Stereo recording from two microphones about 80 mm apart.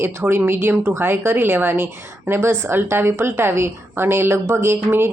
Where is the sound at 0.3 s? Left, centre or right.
Right.